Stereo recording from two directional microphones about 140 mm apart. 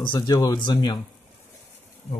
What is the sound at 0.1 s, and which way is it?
Speech, 25° left (ahead or behind).